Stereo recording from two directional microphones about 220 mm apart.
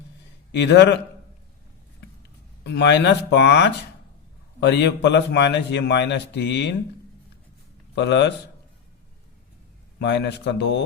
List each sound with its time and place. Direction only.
0.5 s a man's voice: 50° left (ahead or behind)
2.6 s a man's voice: 50° left (ahead or behind)
7.9 s a man's voice: 50° left (ahead or behind)
10.0 s a man's voice: 50° left (ahead or behind)